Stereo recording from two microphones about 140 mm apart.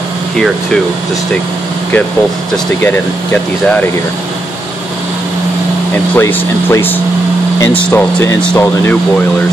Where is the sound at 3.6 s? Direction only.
10° left (ahead or behind).